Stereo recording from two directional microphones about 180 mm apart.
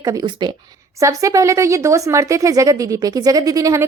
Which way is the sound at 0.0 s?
20° right (ahead or behind).